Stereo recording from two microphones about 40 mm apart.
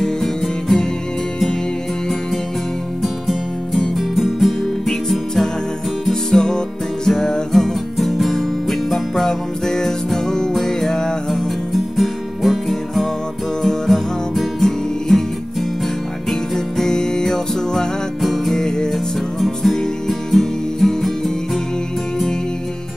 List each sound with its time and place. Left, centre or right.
0.0 s music: centre
3.0 s music: centre
11.2 s music: centre
13.6 s music: centre
18.2 s music: centre
19.7 s music: centre